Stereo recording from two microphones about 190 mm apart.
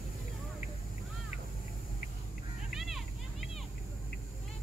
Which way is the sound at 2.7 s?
Centre (ahead or behind).